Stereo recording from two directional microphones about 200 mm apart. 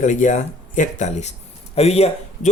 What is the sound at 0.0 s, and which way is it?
Speech, 40° left (ahead or behind).